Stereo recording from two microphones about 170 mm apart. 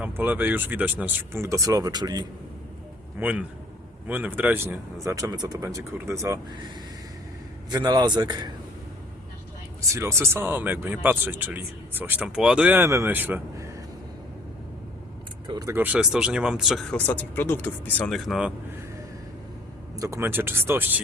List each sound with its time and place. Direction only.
0.0 s speech: 10° right (ahead or behind)
3.2 s speech: 10° right (ahead or behind)
7.7 s a man's voice: 25° right (ahead or behind)
9.9 s speech: 15° right (ahead or behind)
15.4 s speech: 20° right (ahead or behind); by 18.5 s 5° right (ahead or behind)
20.0 s speech: 15° right (ahead or behind)